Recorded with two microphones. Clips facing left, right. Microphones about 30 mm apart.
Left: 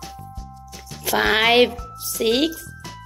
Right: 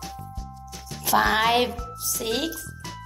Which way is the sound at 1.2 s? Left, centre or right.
Left.